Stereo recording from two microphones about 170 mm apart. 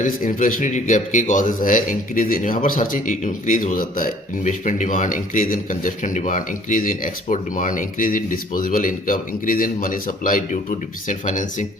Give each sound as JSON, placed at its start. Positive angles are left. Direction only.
{"t": 0.0, "sound": "speech", "side_deg": 50}